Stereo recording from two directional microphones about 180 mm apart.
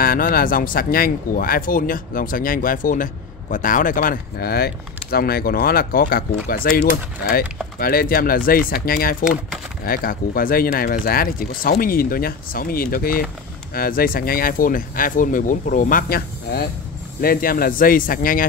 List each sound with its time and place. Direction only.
0.0 s speech: 55° left (ahead or behind)
9.2 s speech: 5° right (ahead or behind)
9.8 s speech: 55° left (ahead or behind)